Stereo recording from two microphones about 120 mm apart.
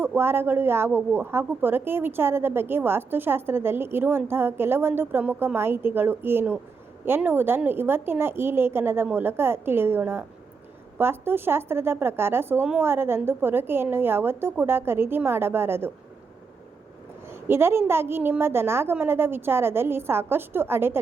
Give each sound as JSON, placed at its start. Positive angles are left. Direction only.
{"t": 0.0, "sound": "a woman's voice", "side_deg": -20}
{"t": 17.2, "sound": "a woman's voice", "side_deg": -20}